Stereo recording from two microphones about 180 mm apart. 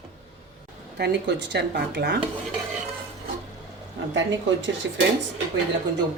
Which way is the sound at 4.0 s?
90° right.